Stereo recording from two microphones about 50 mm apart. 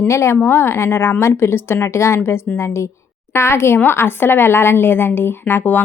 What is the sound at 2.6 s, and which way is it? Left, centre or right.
A woman's voice, left.